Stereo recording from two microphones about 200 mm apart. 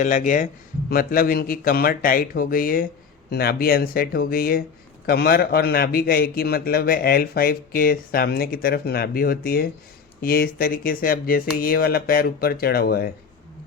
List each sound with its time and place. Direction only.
0.0 s a man's voice: 40° left (ahead or behind)